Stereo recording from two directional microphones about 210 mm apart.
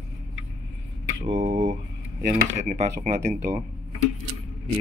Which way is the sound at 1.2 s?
35° right (ahead or behind).